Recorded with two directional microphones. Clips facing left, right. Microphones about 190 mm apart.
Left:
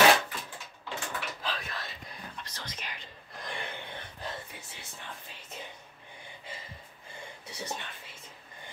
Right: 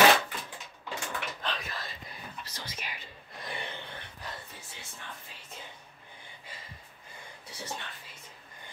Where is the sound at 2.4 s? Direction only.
10° right (ahead or behind).